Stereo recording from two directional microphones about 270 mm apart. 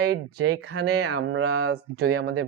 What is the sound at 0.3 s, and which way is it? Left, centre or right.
Speech, right.